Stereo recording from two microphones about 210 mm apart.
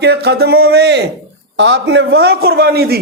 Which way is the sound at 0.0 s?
50° right (ahead or behind).